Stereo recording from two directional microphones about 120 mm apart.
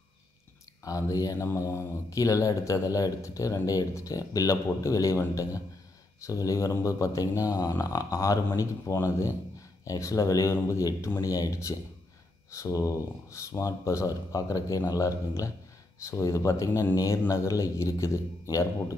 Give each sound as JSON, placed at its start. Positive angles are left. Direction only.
{"t": 0.8, "sound": "speech", "side_deg": 30}